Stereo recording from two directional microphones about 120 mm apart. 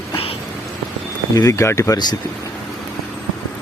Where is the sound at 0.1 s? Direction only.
50° left (ahead or behind).